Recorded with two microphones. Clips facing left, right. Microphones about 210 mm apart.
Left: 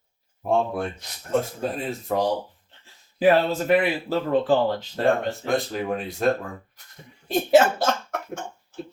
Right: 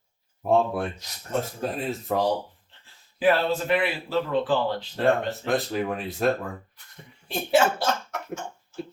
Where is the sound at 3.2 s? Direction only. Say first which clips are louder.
Left 3 dB; 45° left (ahead or behind).